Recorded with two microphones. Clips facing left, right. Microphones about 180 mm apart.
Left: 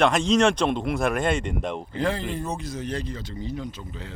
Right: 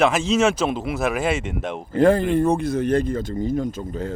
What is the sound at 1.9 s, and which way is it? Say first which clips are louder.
Speech: right 13 dB; 50° right (ahead or behind).